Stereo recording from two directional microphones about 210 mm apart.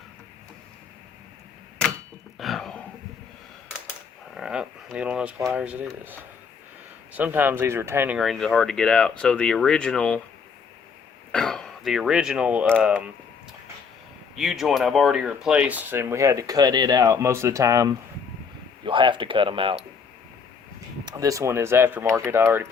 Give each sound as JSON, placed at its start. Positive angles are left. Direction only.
{"t": 2.4, "sound": "a sound", "side_deg": 0}
{"t": 4.4, "sound": "speech", "side_deg": -5}
{"t": 11.3, "sound": "speech", "side_deg": 0}
{"t": 14.3, "sound": "speech", "side_deg": 0}
{"t": 21.0, "sound": "speech", "side_deg": -20}